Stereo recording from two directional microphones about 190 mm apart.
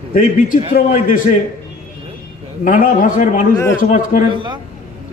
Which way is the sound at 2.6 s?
45° left (ahead or behind).